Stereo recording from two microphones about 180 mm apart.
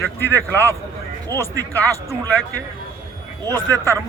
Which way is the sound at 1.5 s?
20° right (ahead or behind).